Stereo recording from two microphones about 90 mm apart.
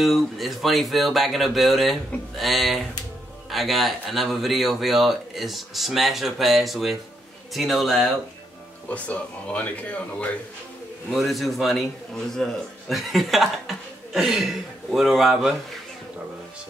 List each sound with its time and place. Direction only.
0.0 s speech: centre (ahead or behind)
8.8 s speech: 15° left (ahead or behind)
11.1 s speech: centre (ahead or behind)